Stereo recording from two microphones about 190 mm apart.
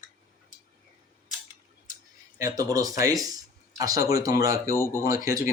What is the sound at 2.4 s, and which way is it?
Speech, 20° right (ahead or behind).